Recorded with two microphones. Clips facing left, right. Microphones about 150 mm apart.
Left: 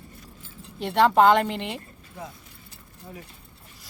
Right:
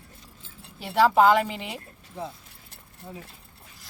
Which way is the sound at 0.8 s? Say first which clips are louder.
Left 1 dB; 5° right (ahead or behind).